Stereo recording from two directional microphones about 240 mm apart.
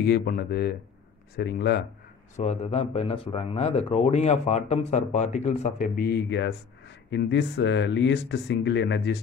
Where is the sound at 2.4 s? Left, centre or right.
Left.